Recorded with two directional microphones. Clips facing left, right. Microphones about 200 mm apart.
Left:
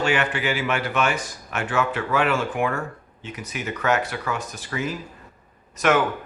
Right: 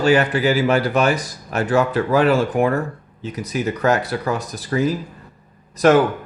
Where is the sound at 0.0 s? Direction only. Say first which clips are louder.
Right 7 dB; 35° right (ahead or behind).